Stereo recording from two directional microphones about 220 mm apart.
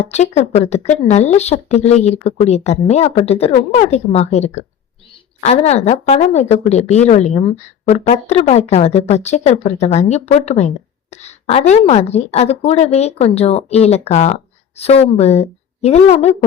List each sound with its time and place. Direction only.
0.1 s a woman's voice: 30° left (ahead or behind)